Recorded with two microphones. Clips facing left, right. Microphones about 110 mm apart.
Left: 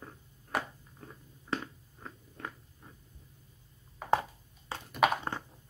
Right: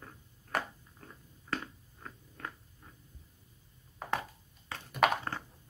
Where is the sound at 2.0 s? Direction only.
20° left (ahead or behind).